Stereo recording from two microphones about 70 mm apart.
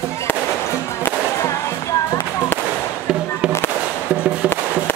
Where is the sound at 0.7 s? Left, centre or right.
Left.